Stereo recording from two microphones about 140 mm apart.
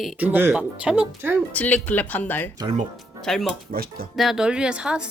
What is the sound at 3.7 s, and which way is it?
Speech, 90° right.